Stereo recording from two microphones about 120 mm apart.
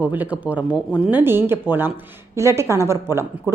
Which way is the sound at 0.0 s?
15° right (ahead or behind).